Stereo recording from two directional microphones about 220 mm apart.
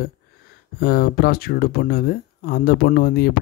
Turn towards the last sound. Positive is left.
turn(degrees=45)  # may be behind; listen again after turning